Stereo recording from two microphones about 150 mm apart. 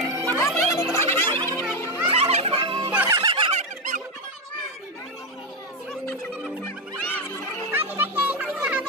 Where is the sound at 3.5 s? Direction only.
55° right (ahead or behind).